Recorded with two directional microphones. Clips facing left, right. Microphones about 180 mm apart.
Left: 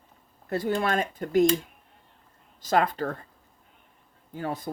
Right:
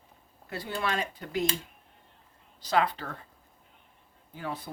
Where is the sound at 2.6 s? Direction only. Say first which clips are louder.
Left 3 dB; 45° left (ahead or behind).